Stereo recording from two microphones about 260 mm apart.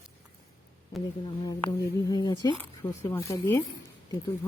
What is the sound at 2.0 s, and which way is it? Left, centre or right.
Speech, centre.